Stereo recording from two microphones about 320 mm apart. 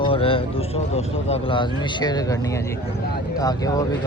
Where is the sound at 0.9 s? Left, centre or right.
Centre.